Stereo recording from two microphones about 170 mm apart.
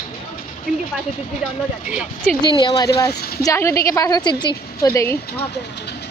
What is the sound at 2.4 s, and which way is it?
A woman's voice, 25° left (ahead or behind).